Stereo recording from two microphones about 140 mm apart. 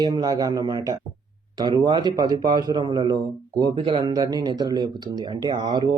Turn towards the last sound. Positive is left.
turn(degrees=-30)  # may be behind; listen again after turning